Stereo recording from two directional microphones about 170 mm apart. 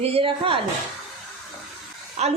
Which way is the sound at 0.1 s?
30° right (ahead or behind).